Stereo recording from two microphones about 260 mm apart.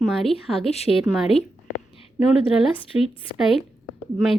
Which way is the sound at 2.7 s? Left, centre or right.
Left.